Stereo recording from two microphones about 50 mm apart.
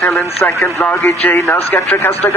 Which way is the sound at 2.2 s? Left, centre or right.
Left.